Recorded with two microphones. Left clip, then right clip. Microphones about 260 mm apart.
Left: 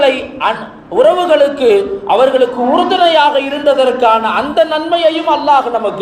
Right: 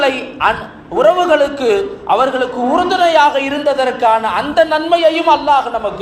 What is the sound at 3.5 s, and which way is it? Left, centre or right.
Speech, right.